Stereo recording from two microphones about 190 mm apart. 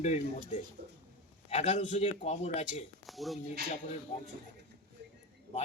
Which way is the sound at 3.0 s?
Centre (ahead or behind).